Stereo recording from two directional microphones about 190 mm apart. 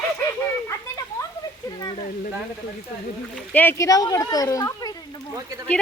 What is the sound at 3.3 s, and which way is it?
Speech, 10° left (ahead or behind).